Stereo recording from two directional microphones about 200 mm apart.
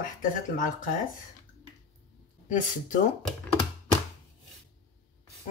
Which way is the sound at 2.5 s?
40° left (ahead or behind).